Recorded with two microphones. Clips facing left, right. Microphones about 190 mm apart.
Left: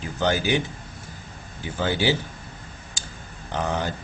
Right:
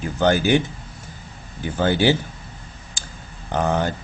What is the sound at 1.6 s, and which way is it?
Speech, 55° right (ahead or behind).